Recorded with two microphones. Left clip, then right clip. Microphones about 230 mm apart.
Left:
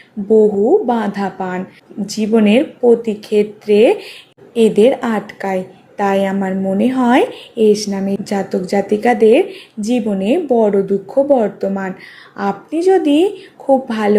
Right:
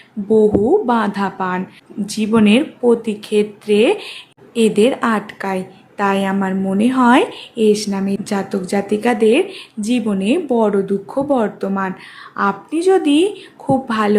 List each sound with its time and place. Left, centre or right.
0.3 s speech: right
0.9 s a woman's voice: centre